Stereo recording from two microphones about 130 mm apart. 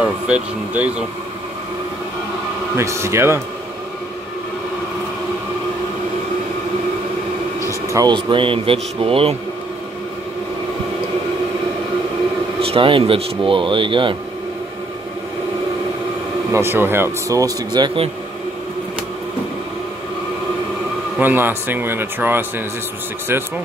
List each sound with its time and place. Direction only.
0.0 s speech: 10° right (ahead or behind)
2.7 s speech: 20° right (ahead or behind)
7.6 s a sound: 25° right (ahead or behind)
8.1 s speech: 40° right (ahead or behind)
12.5 s speech: 45° right (ahead or behind)
16.5 s speech: 15° right (ahead or behind); by 18.0 s 35° right (ahead or behind)
21.2 s speech: 15° right (ahead or behind)